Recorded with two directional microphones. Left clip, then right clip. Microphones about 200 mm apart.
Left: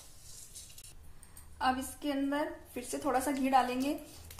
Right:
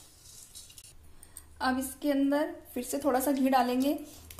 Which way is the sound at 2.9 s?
45° right (ahead or behind).